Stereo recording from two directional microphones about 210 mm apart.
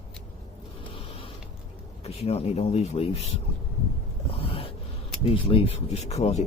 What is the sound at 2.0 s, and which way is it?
Speech, 30° left (ahead or behind).